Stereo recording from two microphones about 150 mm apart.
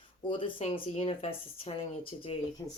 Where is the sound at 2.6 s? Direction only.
25° left (ahead or behind).